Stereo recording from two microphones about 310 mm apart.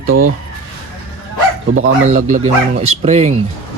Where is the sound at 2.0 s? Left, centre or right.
Right.